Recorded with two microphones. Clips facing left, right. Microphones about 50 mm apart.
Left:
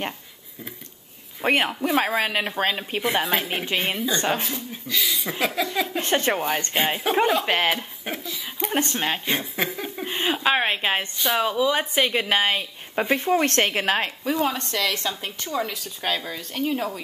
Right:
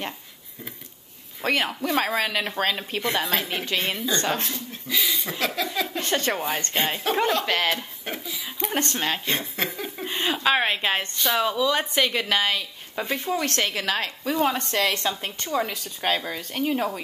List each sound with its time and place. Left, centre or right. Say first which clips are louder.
1.4 s speech: left 3 dB; left
1.7 s a woman's voice: left 2 dB; centre
4.8 s speech: even; centre
5.6 s speech: left 2 dB; centre
5.9 s a woman's voice: left 3 dB; left
8.5 s speech: left 1 dB; centre
8.7 s a woman's voice: left 2 dB; centre; by 14.1 s left
14.4 s a woman's voice: right 3 dB; centre